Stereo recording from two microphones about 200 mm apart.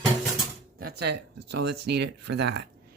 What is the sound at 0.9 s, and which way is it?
Speech, 55° right (ahead or behind).